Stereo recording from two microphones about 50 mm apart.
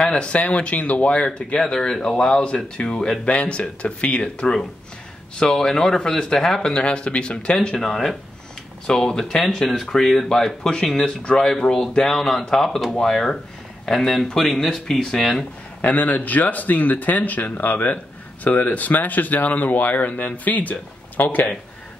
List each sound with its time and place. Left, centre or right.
0.1 s speech: left
5.4 s speech: centre
15.8 s speech: left